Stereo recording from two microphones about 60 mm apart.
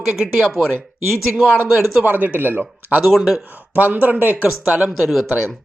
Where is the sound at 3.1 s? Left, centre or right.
Centre.